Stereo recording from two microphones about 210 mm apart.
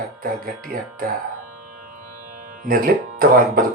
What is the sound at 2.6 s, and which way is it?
Speech, 45° right (ahead or behind).